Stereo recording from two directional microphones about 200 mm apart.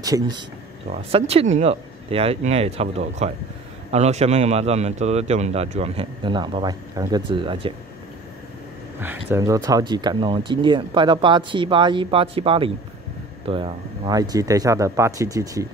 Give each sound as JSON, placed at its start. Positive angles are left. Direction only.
{"t": 1.1, "sound": "a man's voice", "side_deg": -30}
{"t": 9.0, "sound": "speech", "side_deg": -10}